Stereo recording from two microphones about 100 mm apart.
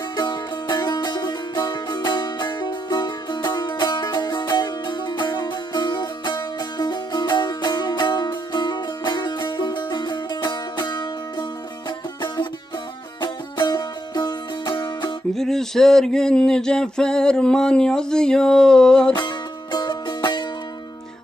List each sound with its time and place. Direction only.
0.2 s music: 45° left (ahead or behind)
15.4 s a sound: 5° left (ahead or behind)
19.7 s music: 50° left (ahead or behind)